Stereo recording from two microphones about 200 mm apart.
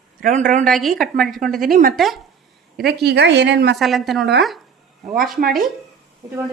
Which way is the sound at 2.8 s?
55° right (ahead or behind).